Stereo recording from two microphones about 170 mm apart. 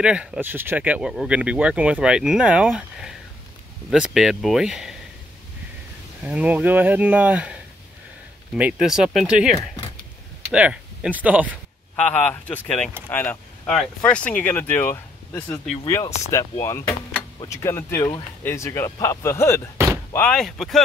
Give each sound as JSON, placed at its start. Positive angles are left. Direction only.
{"t": 0.0, "sound": "speech", "side_deg": -5}
{"t": 6.2, "sound": "speech", "side_deg": -5}
{"t": 12.0, "sound": "speech", "side_deg": 10}